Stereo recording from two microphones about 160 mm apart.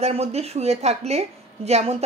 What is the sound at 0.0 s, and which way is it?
A woman's voice, 40° right (ahead or behind).